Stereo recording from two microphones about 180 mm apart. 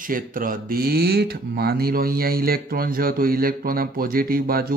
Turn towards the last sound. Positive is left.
turn(degrees=-55)  # may be behind; listen again after turning